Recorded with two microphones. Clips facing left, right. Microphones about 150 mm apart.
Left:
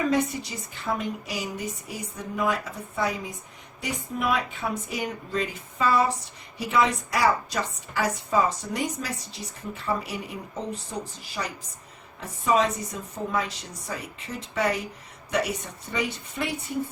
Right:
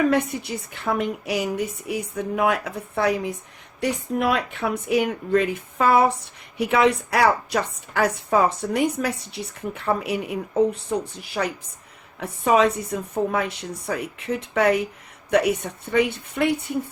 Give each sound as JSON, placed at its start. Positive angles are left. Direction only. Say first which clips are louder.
{"t": 0.1, "sound": "a woman's voice", "louder": "right 3 dB", "side_deg": -60}